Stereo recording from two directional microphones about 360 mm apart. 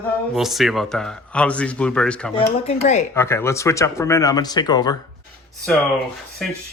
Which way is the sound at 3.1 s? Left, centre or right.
Centre.